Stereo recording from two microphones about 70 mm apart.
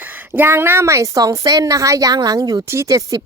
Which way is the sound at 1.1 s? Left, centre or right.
Right.